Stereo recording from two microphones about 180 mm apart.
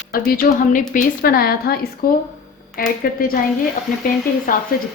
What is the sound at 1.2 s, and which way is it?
A woman's voice, 55° left (ahead or behind).